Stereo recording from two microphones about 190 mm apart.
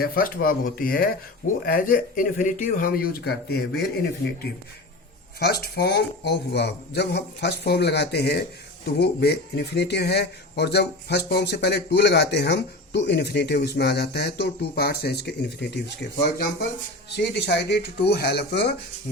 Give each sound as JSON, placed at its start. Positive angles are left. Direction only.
{"t": 0.0, "sound": "speech", "side_deg": 50}
{"t": 5.4, "sound": "speech", "side_deg": 55}
{"t": 17.2, "sound": "speech", "side_deg": 65}